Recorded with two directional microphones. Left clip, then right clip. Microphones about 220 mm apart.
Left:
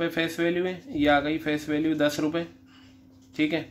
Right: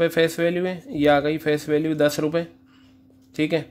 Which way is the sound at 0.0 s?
50° right (ahead or behind).